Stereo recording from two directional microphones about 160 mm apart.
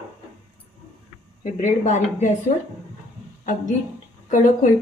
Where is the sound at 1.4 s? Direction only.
50° left (ahead or behind).